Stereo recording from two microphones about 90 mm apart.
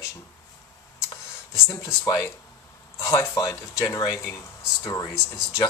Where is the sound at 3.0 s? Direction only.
35° left (ahead or behind).